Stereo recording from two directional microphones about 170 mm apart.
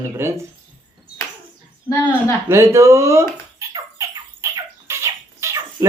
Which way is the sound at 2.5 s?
15° right (ahead or behind).